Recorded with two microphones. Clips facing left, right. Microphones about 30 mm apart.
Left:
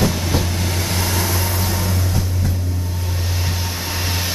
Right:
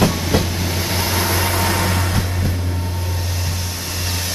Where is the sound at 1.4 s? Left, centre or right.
Right.